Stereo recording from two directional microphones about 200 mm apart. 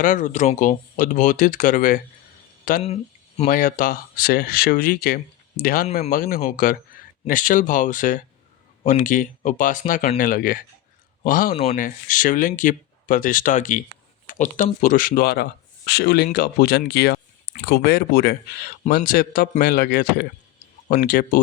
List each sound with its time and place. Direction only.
0.0 s speech: 40° left (ahead or behind)
2.8 s speech: 30° left (ahead or behind)
11.5 s speech: 35° left (ahead or behind)